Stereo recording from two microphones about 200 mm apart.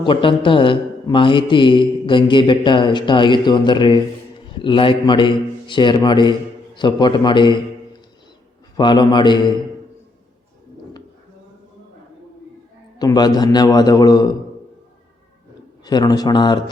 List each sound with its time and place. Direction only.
0.0 s a man's voice: 25° left (ahead or behind)
8.7 s a man's voice: 20° left (ahead or behind)
13.0 s a man's voice: 20° left (ahead or behind)
15.8 s a man's voice: 20° left (ahead or behind)